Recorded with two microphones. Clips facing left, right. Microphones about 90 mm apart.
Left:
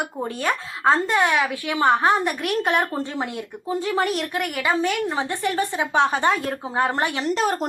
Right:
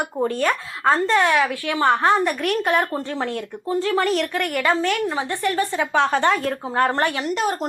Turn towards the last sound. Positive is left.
turn(degrees=35)  # may be behind; listen again after turning